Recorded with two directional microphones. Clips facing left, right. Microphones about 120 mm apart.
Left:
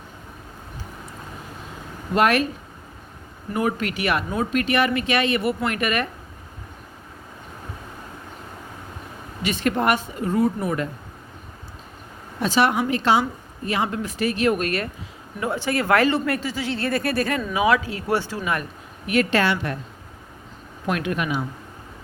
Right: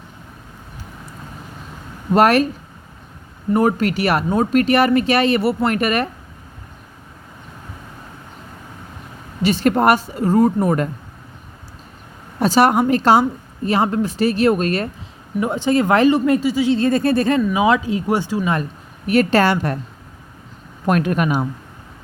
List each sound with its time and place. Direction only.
2.1 s speech: 40° right (ahead or behind)
3.5 s speech: 40° right (ahead or behind)
9.4 s speech: 35° right (ahead or behind)
12.4 s a woman's voice: 40° right (ahead or behind)
15.4 s speech: 20° right (ahead or behind)
19.0 s speech: 40° right (ahead or behind)
20.8 s speech: 45° right (ahead or behind)